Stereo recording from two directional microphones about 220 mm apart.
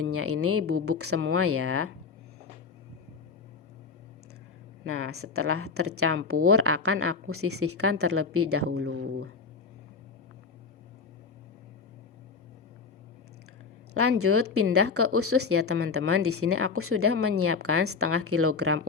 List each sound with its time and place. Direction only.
0.0 s a woman's voice: 90° right
4.9 s a woman's voice: 80° right
14.2 s a woman's voice: 80° right